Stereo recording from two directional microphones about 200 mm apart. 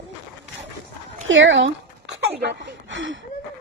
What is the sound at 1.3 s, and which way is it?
Speech, 70° right (ahead or behind).